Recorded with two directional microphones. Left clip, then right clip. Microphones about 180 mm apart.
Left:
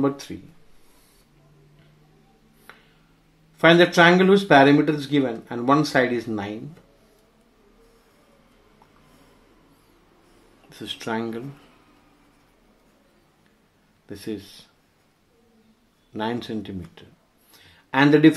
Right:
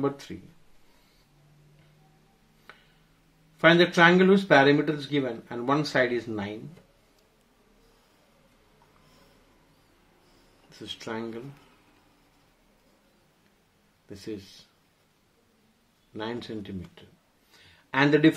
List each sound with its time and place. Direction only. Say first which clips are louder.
2.7 s a sound: left 4 dB; 10° left (ahead or behind)
3.5 s speech: left 5 dB; 10° left (ahead or behind)
10.7 s speech: left 7 dB; 20° left (ahead or behind)
14.0 s speech: left 5 dB; 20° left (ahead or behind)
16.1 s speech: left 7 dB; 15° left (ahead or behind)